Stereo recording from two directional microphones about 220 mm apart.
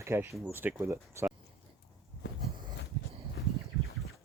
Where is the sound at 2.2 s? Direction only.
55° left (ahead or behind).